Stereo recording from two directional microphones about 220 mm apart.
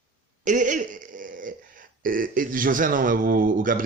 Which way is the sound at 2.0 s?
40° right (ahead or behind).